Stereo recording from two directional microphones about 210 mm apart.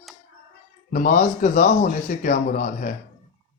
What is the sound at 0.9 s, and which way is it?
Speech, 40° left (ahead or behind).